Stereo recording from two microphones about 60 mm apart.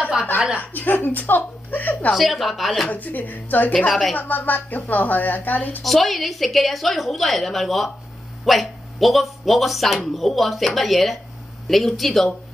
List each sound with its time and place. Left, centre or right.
0.0 s a sound: centre
0.6 s a woman's voice: left
2.1 s speech: centre
2.9 s a woman's voice: left
5.8 s speech: centre